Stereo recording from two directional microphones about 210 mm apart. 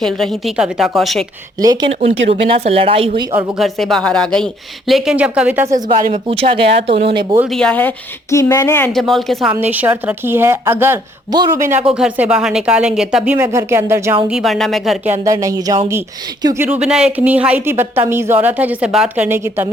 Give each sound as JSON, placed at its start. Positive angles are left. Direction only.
{"t": 0.0, "sound": "speech", "side_deg": 0}
{"t": 1.6, "sound": "speech", "side_deg": -20}
{"t": 1.9, "sound": "speech", "side_deg": -30}
{"t": 3.3, "sound": "speech", "side_deg": 0}
{"t": 5.7, "sound": "speech", "side_deg": -40}
{"t": 6.1, "sound": "speech", "side_deg": -25}
{"t": 7.5, "sound": "speech", "side_deg": 5}
{"t": 9.0, "sound": "speech", "side_deg": 0}
{"t": 14.3, "sound": "speech", "side_deg": 0}
{"t": 15.1, "sound": "speech", "side_deg": -15}
{"t": 16.6, "sound": "speech", "side_deg": -5}